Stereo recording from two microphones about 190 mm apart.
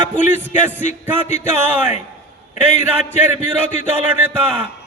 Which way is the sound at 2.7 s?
35° left (ahead or behind).